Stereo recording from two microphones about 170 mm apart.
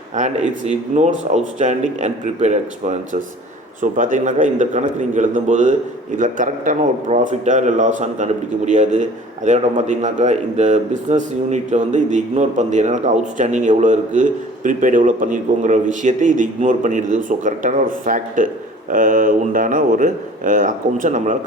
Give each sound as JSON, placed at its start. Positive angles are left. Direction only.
{"t": 0.2, "sound": "a man's voice", "side_deg": -45}